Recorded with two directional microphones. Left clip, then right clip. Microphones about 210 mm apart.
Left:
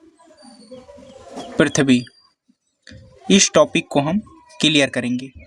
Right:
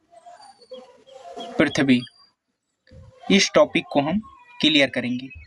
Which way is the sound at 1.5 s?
45° left (ahead or behind).